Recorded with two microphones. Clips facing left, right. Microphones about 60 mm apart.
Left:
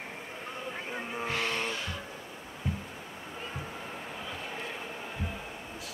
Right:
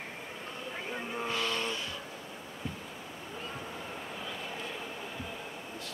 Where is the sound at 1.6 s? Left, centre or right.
Left.